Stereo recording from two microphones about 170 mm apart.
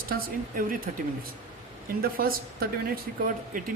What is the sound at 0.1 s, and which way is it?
Speech, 55° right (ahead or behind).